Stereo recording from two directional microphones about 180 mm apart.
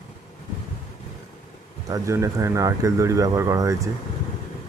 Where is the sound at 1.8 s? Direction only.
15° right (ahead or behind).